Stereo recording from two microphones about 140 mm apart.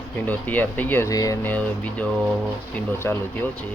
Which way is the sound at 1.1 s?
25° left (ahead or behind).